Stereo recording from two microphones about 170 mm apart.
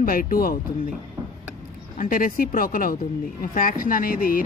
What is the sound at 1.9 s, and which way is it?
Speech, 55° left (ahead or behind).